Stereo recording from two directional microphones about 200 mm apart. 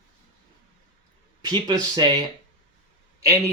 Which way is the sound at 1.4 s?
20° right (ahead or behind).